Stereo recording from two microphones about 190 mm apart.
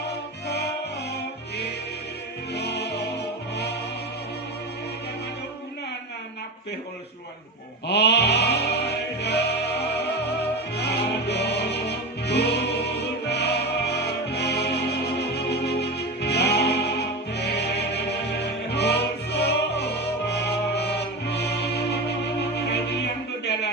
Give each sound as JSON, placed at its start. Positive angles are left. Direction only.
{"t": 2.6, "sound": "music", "side_deg": 60}
{"t": 7.9, "sound": "music", "side_deg": 60}